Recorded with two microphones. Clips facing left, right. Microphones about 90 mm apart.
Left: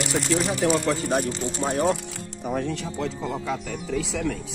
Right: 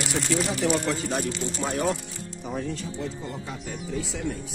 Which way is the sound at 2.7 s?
90° left.